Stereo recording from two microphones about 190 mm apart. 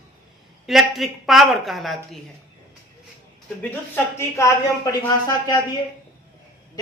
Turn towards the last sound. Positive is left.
turn(degrees=20)  # may be behind; listen again after turning